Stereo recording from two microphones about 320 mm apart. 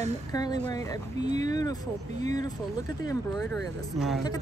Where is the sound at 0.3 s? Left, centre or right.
Centre.